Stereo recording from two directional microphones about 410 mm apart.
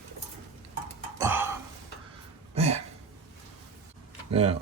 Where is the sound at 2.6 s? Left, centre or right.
Centre.